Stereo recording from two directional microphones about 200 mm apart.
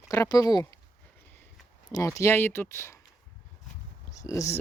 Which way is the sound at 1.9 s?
15° left (ahead or behind).